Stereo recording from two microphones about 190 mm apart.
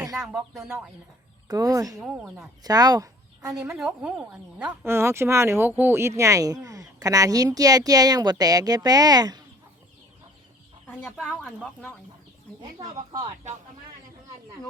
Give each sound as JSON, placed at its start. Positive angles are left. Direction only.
{"t": 0.2, "sound": "speech", "side_deg": 0}
{"t": 1.5, "sound": "speech", "side_deg": -20}
{"t": 2.0, "sound": "speech", "side_deg": -5}
{"t": 2.6, "sound": "speech", "side_deg": -20}
{"t": 3.7, "sound": "speech", "side_deg": -5}
{"t": 10.8, "sound": "speech", "side_deg": 5}
{"t": 13.2, "sound": "speech", "side_deg": -40}